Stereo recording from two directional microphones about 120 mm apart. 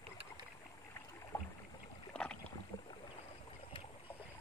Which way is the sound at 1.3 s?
15° left (ahead or behind).